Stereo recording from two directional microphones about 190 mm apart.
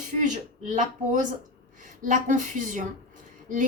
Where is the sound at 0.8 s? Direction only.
40° right (ahead or behind).